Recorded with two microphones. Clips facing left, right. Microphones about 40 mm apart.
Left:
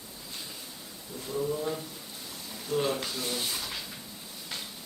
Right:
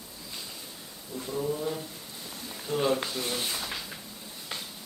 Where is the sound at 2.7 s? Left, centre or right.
Centre.